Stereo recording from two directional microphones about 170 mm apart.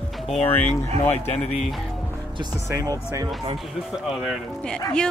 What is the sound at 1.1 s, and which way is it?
Speech, 40° left (ahead or behind).